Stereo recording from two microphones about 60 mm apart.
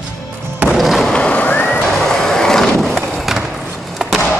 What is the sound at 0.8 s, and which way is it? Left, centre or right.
Skateboard, centre.